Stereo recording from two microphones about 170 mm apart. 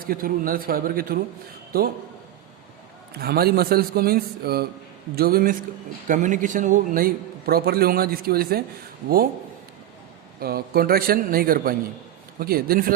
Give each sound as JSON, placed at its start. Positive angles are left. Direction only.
{"t": 0.0, "sound": "a man's voice", "side_deg": -55}
{"t": 3.2, "sound": "a man's voice", "side_deg": -65}
{"t": 10.4, "sound": "a man's voice", "side_deg": -60}